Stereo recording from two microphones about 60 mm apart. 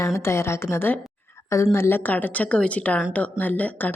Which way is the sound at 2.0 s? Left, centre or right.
Left.